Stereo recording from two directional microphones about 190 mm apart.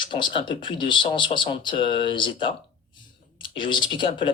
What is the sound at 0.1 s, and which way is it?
Speech, 25° left (ahead or behind).